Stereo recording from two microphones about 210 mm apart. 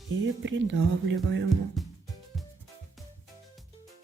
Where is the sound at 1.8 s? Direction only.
Centre (ahead or behind).